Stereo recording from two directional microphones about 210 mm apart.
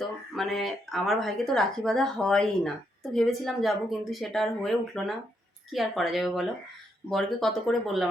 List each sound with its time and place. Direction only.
0.0 s speech: centre (ahead or behind)